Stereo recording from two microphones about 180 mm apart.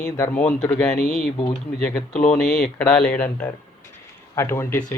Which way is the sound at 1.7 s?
5° left (ahead or behind).